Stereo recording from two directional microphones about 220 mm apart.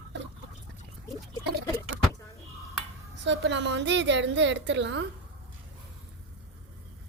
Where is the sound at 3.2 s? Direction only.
55° right (ahead or behind).